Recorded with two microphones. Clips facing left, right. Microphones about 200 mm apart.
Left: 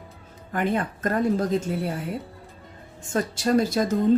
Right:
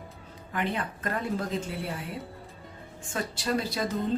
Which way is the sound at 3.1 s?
45° left (ahead or behind).